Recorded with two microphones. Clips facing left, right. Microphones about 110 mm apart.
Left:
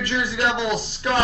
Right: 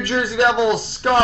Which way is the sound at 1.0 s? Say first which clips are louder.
Right 6 dB; 45° right (ahead or behind).